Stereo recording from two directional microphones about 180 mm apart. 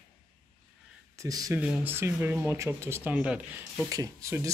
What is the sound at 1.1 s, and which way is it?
Speech, 20° right (ahead or behind).